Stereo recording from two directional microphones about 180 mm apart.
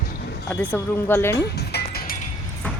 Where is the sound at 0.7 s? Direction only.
15° left (ahead or behind).